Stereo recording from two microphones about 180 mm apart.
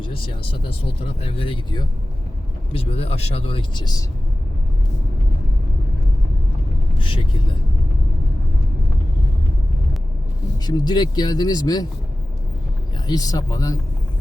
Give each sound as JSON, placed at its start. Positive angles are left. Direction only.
{"t": 0.0, "sound": "speech", "side_deg": 30}
{"t": 7.0, "sound": "speech", "side_deg": 30}
{"t": 10.7, "sound": "speech", "side_deg": 25}
{"t": 13.1, "sound": "speech", "side_deg": 20}